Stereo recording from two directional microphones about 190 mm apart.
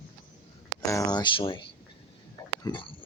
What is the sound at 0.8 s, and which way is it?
Speech, 15° left (ahead or behind).